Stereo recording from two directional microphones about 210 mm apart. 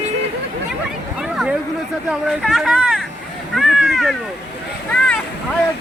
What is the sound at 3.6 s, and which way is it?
Cat, centre (ahead or behind).